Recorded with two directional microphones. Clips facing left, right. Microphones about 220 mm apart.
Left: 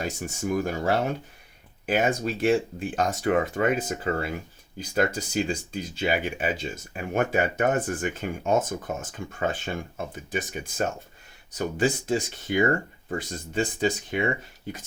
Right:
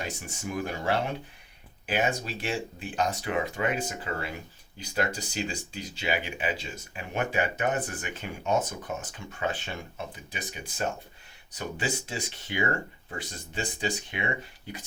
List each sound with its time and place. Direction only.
0.0 s speech: 45° left (ahead or behind)